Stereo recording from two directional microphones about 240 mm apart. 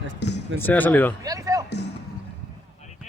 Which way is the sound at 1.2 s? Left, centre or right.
Centre.